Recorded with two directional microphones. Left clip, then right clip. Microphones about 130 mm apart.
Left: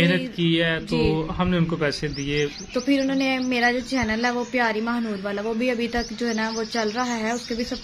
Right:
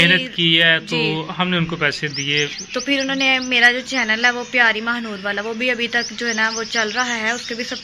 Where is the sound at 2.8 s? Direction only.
20° left (ahead or behind).